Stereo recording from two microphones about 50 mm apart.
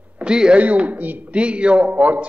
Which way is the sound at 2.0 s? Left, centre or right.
Right.